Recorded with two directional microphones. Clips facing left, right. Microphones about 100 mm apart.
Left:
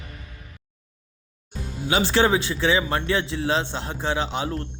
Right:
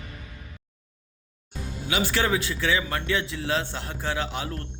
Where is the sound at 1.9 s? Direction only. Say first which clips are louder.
Left 5 dB; 30° left (ahead or behind).